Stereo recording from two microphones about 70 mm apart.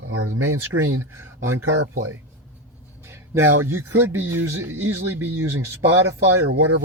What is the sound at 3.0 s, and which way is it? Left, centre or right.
Speech, right.